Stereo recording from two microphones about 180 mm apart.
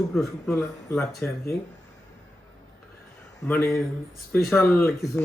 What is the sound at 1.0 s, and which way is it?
Speech, 15° left (ahead or behind).